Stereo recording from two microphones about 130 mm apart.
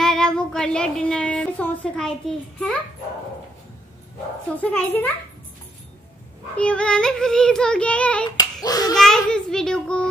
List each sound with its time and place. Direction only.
0.0 s child singing: 5° left (ahead or behind)
4.6 s child singing: 10° left (ahead or behind)
6.5 s child singing: 10° left (ahead or behind)
8.4 s speech: 30° left (ahead or behind)
8.9 s a child's voice: 5° left (ahead or behind)